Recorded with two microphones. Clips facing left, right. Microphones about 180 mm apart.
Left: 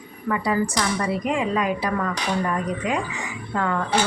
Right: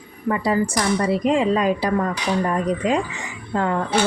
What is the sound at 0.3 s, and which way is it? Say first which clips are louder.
Speech: right 2 dB; 30° right (ahead or behind).